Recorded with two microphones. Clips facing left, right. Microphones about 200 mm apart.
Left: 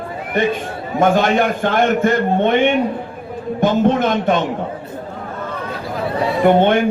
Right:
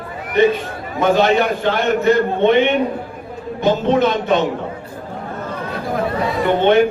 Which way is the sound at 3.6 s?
50° left (ahead or behind).